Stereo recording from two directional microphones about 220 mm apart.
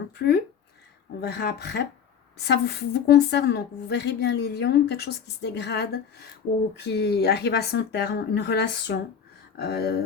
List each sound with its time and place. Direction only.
0.2 s a woman's voice: 50° left (ahead or behind)